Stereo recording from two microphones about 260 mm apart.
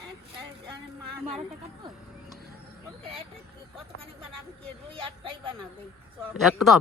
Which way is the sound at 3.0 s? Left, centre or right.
Right.